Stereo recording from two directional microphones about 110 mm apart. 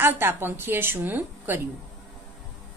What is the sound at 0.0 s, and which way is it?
A woman's voice, 20° right (ahead or behind).